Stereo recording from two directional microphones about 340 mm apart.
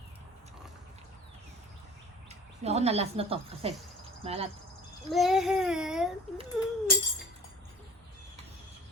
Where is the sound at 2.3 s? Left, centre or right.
Centre.